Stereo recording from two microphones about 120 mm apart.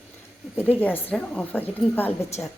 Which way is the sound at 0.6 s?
15° left (ahead or behind).